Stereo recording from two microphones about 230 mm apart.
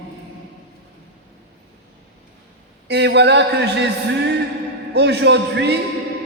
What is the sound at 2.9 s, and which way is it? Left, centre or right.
Speech, right.